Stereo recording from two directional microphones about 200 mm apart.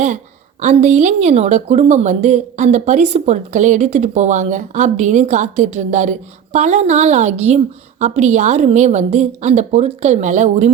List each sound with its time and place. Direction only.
0.6 s a woman's voice: 35° right (ahead or behind)